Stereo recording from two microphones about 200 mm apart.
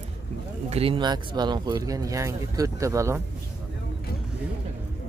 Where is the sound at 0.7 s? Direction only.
30° right (ahead or behind).